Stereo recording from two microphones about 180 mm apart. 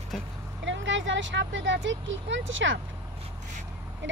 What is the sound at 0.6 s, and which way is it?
Speech, 90° right.